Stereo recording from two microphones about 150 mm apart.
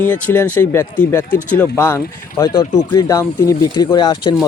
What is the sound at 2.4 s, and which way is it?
Speech, 30° left (ahead or behind).